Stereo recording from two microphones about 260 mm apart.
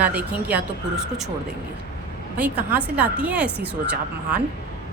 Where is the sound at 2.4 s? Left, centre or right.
Centre.